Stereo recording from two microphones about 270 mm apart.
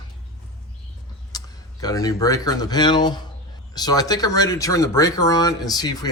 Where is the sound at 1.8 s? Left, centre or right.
Centre.